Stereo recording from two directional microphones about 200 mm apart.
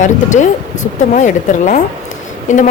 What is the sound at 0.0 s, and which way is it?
A woman's voice, 40° left (ahead or behind).